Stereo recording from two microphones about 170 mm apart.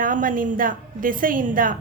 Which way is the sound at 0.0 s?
50° right (ahead or behind).